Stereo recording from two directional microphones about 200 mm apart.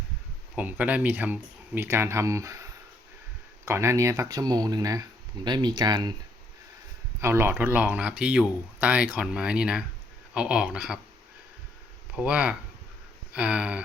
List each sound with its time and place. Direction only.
0.5 s speech: 5° right (ahead or behind)
7.2 s speech: 10° right (ahead or behind)
12.1 s speech: 5° right (ahead or behind)